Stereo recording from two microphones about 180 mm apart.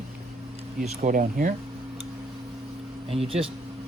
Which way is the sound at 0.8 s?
45° right (ahead or behind).